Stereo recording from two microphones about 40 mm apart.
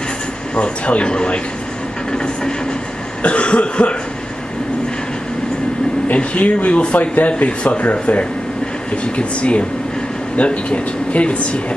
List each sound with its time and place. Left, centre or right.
0.6 s speech: left
3.2 s speech: left
6.1 s speech: left